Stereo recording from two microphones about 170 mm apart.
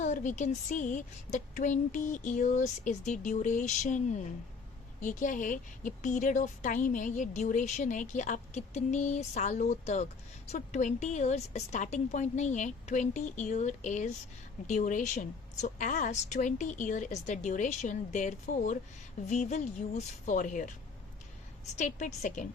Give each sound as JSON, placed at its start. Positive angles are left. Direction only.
{"t": 0.0, "sound": "a woman's voice", "side_deg": 45}
{"t": 21.8, "sound": "a woman's voice", "side_deg": 45}